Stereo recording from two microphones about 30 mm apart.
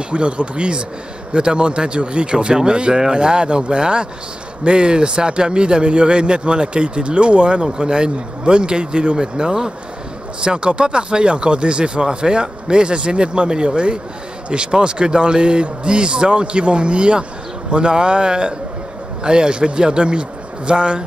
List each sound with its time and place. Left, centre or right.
0.1 s speech: right
2.3 s speech: right